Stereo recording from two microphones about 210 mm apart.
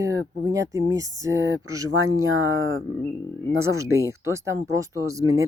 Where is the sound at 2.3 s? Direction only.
70° right (ahead or behind).